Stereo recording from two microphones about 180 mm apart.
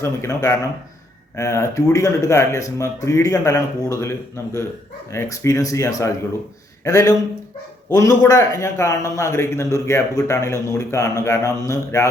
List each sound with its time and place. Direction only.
0.0 s a man's voice: 15° left (ahead or behind)